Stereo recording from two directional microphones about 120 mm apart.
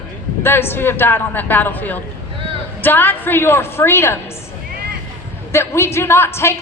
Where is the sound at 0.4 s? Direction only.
20° left (ahead or behind).